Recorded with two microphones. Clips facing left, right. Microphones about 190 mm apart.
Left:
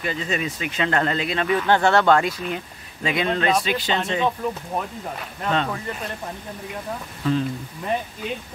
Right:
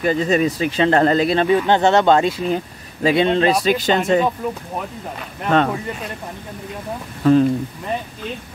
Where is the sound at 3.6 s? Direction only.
45° right (ahead or behind).